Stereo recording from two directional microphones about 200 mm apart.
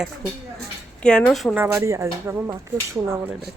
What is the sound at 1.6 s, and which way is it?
A woman's voice, 15° right (ahead or behind).